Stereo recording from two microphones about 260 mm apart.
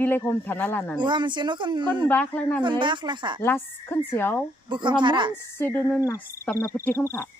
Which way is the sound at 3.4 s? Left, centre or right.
Centre.